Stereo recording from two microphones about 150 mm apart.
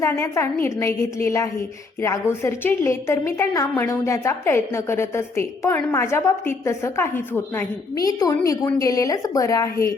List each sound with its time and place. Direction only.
0.0 s a woman's voice: 20° left (ahead or behind)